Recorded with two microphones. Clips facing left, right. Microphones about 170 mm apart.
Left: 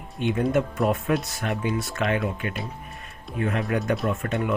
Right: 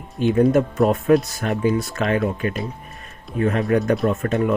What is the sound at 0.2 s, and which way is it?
Speech, 35° right (ahead or behind).